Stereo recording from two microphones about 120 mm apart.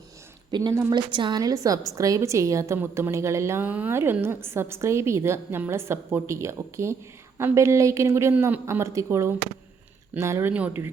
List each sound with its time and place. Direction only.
0.5 s a woman's voice: 35° right (ahead or behind)
10.5 s speech: 10° right (ahead or behind)